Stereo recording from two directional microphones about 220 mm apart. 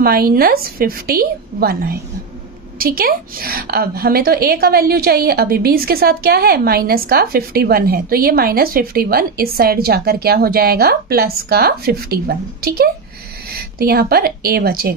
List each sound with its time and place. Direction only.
0.0 s a woman's voice: 45° right (ahead or behind)